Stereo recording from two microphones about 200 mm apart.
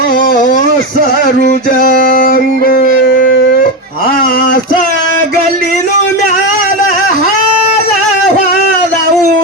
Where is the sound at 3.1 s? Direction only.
70° left (ahead or behind).